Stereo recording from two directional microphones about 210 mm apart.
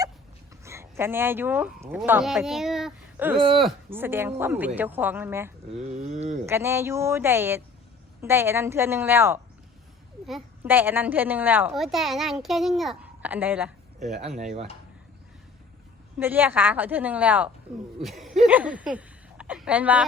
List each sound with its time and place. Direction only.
0.6 s speech: 15° right (ahead or behind)
5.9 s speech: 30° right (ahead or behind)
6.4 s a woman's voice: 10° right (ahead or behind)
14.3 s speech: 35° right (ahead or behind)
16.1 s a woman's voice: 10° right (ahead or behind)